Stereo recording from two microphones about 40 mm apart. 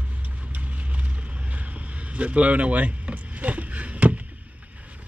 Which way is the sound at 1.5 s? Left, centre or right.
Right.